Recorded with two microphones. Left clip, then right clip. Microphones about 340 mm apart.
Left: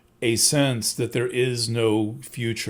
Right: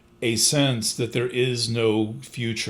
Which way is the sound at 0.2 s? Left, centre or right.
Left.